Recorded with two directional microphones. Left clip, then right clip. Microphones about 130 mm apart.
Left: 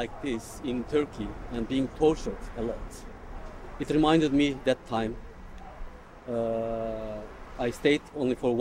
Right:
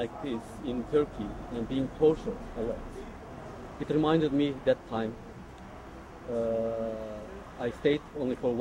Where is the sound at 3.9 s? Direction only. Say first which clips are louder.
Left 3 dB; 20° left (ahead or behind).